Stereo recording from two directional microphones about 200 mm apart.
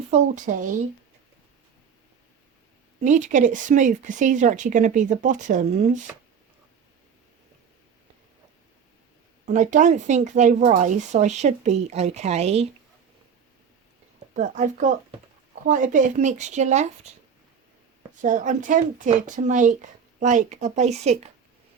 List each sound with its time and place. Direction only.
0.1 s speech: 40° right (ahead or behind)
3.0 s speech: 40° right (ahead or behind)
9.5 s speech: 35° right (ahead or behind)
14.3 s speech: 35° right (ahead or behind)
18.2 s speech: 40° right (ahead or behind)